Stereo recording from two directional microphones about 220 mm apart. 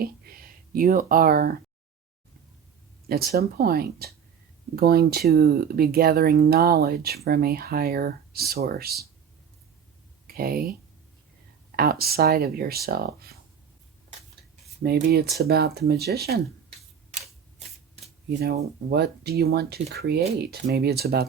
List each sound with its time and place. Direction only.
0.0 s speech: 40° right (ahead or behind)
3.1 s speech: 45° right (ahead or behind)
10.3 s speech: 40° right (ahead or behind)
11.8 s speech: 45° right (ahead or behind)
14.8 s speech: 45° right (ahead or behind)
18.3 s speech: 45° right (ahead or behind)